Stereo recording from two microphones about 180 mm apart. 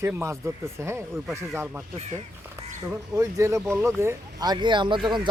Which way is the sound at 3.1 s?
15° right (ahead or behind).